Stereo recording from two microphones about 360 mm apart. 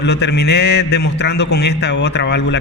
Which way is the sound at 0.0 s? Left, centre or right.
Left.